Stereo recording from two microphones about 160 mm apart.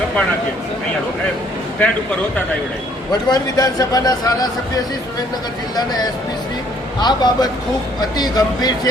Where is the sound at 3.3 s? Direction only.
25° left (ahead or behind).